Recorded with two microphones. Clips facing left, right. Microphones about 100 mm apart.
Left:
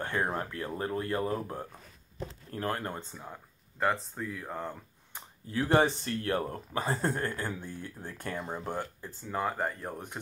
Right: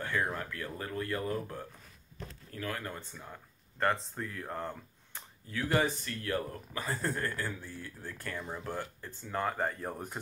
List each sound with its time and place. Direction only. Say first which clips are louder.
0.0 s speech: left 2 dB; 30° left (ahead or behind)
3.0 s speech: left 3 dB; 15° left (ahead or behind)
3.8 s speech: left 1 dB; 5° left (ahead or behind)
5.5 s speech: left 5 dB; 30° left (ahead or behind)
8.6 s speech: left 3 dB; 20° left (ahead or behind)
9.2 s speech: left 1 dB; 5° left (ahead or behind)